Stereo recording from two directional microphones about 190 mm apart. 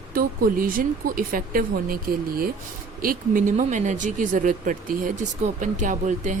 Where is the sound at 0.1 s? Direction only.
50° right (ahead or behind).